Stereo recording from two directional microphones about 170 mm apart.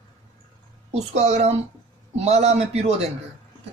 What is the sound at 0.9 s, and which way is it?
A man's voice, 40° right (ahead or behind).